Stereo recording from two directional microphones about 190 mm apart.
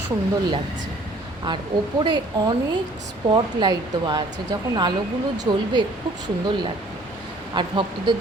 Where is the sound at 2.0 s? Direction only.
25° right (ahead or behind).